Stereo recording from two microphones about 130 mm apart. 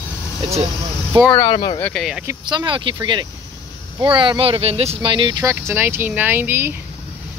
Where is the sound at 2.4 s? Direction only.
35° right (ahead or behind).